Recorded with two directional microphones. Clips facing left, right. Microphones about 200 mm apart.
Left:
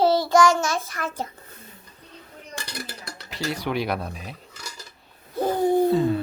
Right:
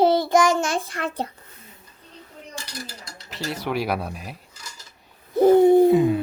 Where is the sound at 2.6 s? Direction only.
65° left (ahead or behind).